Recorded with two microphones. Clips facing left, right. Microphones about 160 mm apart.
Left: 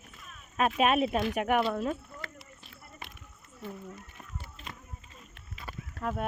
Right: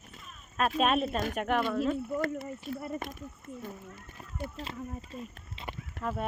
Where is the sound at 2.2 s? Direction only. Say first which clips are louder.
Right 15 dB; 45° right (ahead or behind).